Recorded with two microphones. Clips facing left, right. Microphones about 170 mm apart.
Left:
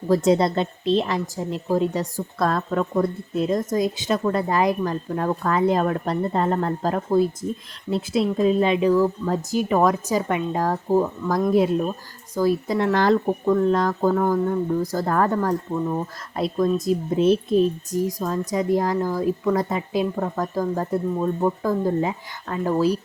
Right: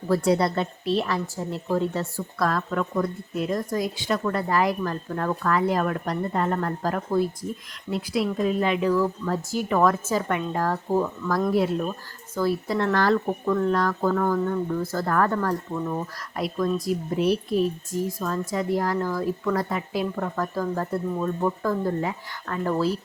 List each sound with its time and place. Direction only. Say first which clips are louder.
0.1 s speech: left 3 dB; 20° left (ahead or behind)
2.4 s speech: left 3 dB; 25° left (ahead or behind)